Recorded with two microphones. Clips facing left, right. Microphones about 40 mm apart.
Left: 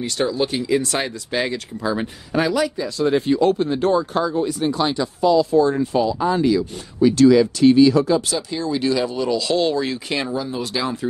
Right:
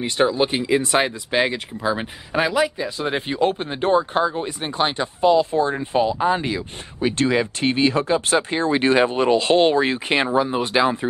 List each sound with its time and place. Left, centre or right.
0.0 s speech: right